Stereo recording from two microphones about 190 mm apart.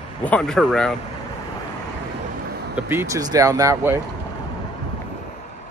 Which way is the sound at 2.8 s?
10° right (ahead or behind).